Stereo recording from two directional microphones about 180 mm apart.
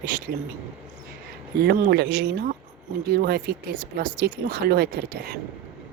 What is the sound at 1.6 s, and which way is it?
Speech, 65° right (ahead or behind).